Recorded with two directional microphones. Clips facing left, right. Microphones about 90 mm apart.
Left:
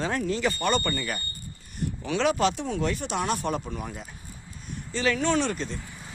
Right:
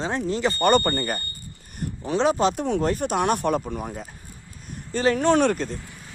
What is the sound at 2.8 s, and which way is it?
Speech, 45° right (ahead or behind).